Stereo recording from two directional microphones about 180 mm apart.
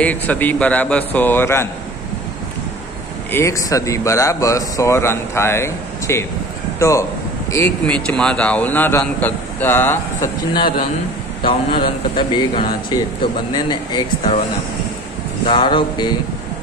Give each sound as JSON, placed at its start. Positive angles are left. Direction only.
{"t": 0.0, "sound": "speech", "side_deg": 10}
{"t": 3.3, "sound": "speech", "side_deg": 15}
{"t": 11.4, "sound": "speech", "side_deg": 25}
{"t": 15.4, "sound": "speech", "side_deg": 30}